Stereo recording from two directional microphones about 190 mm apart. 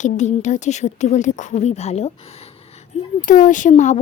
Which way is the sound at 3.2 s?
45° left (ahead or behind).